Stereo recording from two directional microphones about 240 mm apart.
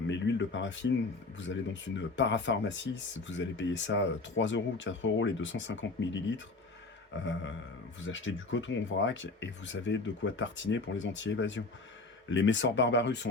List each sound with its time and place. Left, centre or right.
0.1 s speech: left